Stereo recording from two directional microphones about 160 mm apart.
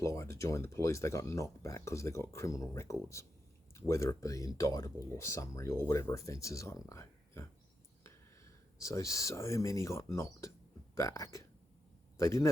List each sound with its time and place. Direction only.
0.0 s a man's voice: 20° left (ahead or behind)